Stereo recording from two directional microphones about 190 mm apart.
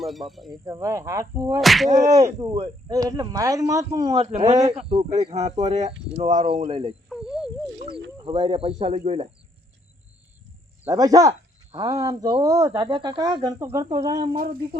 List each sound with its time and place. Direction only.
0.0 s speech: centre (ahead or behind)
0.6 s speech: 15° right (ahead or behind)
1.6 s speech: centre (ahead or behind)
2.2 s speech: 20° right (ahead or behind)
4.2 s speech: 35° right (ahead or behind)
7.1 s cricket: centre (ahead or behind)
8.2 s speech: 25° right (ahead or behind)
10.8 s speech: 20° right (ahead or behind)
14.3 s a sound: 50° right (ahead or behind)